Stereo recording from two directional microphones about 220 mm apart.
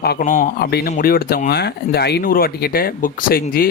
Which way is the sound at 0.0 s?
40° left (ahead or behind).